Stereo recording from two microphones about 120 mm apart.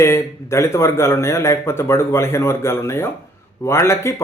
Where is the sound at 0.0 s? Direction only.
25° left (ahead or behind).